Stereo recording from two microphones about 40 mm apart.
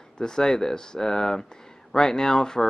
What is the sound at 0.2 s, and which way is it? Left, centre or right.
Speech, centre.